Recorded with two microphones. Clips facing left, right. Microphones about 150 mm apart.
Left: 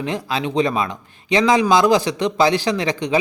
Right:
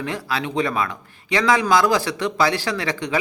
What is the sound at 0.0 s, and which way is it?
Speech, 20° left (ahead or behind).